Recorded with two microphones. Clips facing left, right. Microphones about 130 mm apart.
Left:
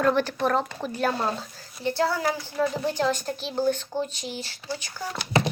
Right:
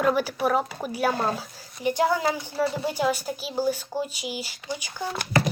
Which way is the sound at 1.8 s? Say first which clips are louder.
Right 2 dB; 15° right (ahead or behind).